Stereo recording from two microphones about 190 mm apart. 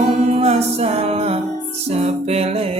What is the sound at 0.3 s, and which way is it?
Music, 35° right (ahead or behind).